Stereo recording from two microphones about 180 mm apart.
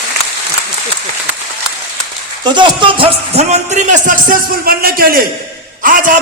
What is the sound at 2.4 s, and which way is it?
Speech, 25° right (ahead or behind).